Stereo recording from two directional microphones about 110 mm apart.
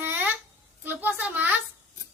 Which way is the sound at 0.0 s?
15° right (ahead or behind).